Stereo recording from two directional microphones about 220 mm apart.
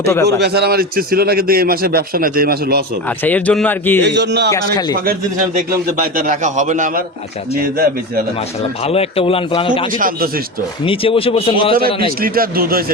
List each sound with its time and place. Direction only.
0.0 s a man's voice: 10° left (ahead or behind)
0.3 s a man's voice: 50° right (ahead or behind)
3.1 s a man's voice: 5° left (ahead or behind)
4.0 s a man's voice: 50° right (ahead or behind)
4.5 s a man's voice: 15° left (ahead or behind)
5.5 s a man's voice: 35° right (ahead or behind)
8.8 s a man's voice: 25° left (ahead or behind)
10.0 s a man's voice: 40° right (ahead or behind)
10.8 s a man's voice: 25° left (ahead or behind)
12.2 s a man's voice: 40° right (ahead or behind)